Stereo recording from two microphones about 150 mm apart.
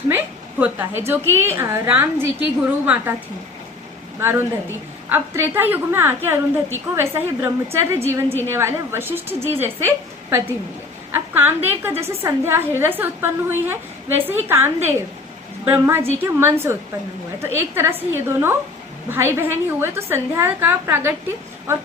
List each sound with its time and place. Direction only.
0.6 s a woman's voice: 15° right (ahead or behind)
4.2 s a woman's voice: 15° right (ahead or behind)